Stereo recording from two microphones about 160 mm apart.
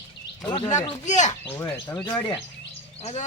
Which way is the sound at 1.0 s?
50° left (ahead or behind).